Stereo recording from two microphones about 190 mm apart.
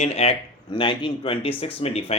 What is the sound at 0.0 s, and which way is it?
A man's voice, 35° left (ahead or behind).